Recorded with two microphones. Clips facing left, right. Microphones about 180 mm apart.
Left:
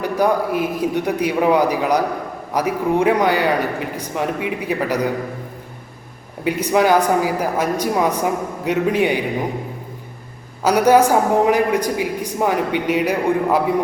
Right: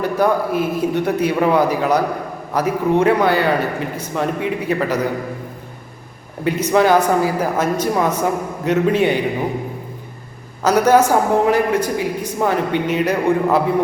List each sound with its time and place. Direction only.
0.0 s a man's voice: 15° left (ahead or behind)
6.4 s a man's voice: 10° left (ahead or behind)
10.6 s a man's voice: 10° left (ahead or behind)